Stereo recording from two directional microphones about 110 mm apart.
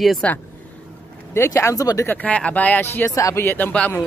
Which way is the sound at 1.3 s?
25° left (ahead or behind).